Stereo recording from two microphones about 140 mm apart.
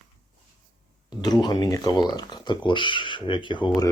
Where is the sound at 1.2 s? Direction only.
30° left (ahead or behind).